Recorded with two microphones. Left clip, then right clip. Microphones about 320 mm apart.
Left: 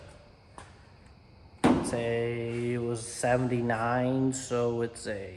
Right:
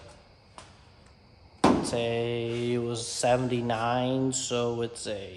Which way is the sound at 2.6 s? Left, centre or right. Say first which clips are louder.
Right 2 dB; centre.